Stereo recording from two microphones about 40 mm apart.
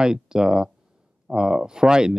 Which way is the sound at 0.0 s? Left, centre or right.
Centre.